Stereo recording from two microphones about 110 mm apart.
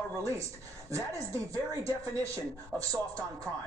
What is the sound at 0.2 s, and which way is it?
Speech, 25° right (ahead or behind).